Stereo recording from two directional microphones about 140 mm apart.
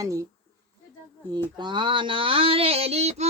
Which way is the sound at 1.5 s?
35° right (ahead or behind).